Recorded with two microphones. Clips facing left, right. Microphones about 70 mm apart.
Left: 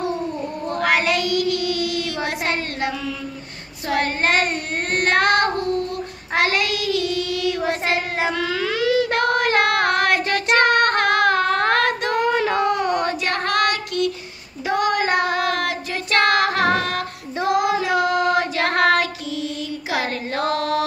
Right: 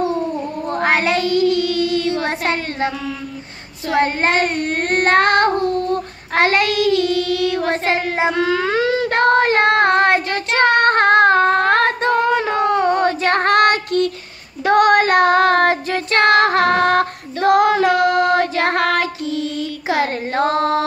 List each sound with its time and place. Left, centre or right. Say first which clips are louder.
0.7 s child singing: right 2 dB; right
2.2 s a woman's voice: right 3 dB; right
3.9 s child singing: right 3 dB; right
14.6 s child singing: right 8 dB; right